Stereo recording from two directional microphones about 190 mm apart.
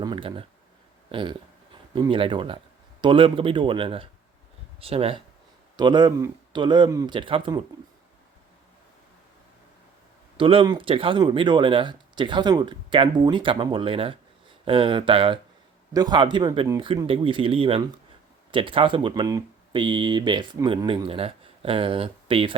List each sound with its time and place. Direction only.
0.0 s a sound: 25° right (ahead or behind)
1.1 s speech: 25° right (ahead or behind)
10.3 s speech: 25° right (ahead or behind)